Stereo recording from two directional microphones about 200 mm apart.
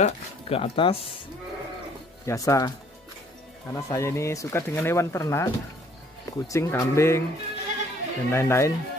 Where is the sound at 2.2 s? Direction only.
15° left (ahead or behind).